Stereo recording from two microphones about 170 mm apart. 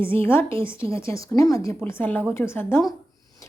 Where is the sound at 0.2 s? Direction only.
15° left (ahead or behind).